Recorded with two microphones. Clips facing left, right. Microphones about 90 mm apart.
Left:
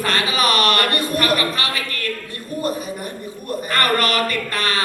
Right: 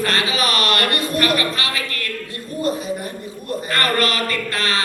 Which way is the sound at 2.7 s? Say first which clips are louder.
Right 4 dB; 30° right (ahead or behind).